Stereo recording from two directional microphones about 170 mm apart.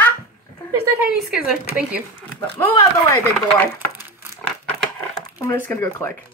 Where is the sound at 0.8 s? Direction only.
10° right (ahead or behind).